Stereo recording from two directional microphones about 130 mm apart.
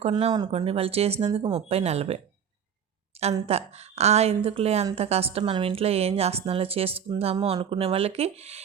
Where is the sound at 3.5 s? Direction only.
55° right (ahead or behind).